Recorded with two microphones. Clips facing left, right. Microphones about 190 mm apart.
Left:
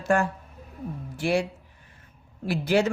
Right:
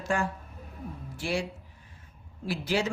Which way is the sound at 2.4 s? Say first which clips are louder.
Left 6 dB; 55° left (ahead or behind).